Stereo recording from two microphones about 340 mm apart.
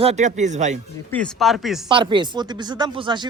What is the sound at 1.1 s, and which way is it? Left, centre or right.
Speech, centre.